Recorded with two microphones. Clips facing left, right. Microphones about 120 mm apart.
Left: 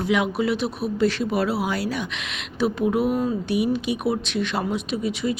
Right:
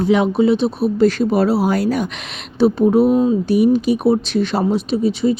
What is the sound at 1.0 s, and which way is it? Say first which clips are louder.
Speech: right 7 dB; 40° right (ahead or behind).